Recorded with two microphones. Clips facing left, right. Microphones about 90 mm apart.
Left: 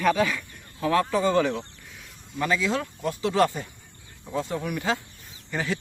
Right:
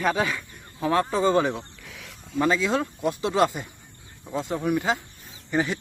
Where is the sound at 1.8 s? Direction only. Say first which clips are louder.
Right 4 dB; 90° right.